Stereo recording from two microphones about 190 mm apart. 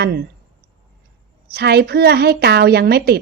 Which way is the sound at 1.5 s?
55° right (ahead or behind).